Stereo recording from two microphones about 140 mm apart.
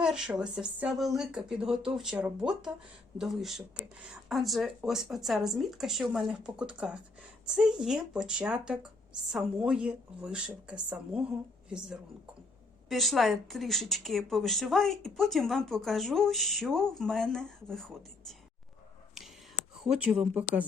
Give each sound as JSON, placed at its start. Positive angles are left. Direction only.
{"t": 0.0, "sound": "speech", "side_deg": -5}
{"t": 12.9, "sound": "speech", "side_deg": 0}
{"t": 19.8, "sound": "speech", "side_deg": -5}